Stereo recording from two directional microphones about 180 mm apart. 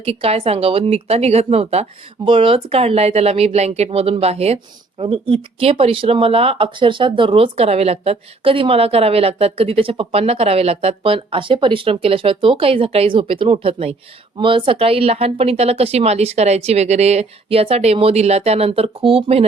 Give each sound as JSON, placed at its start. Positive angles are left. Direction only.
{"t": 0.0, "sound": "a woman's voice", "side_deg": -35}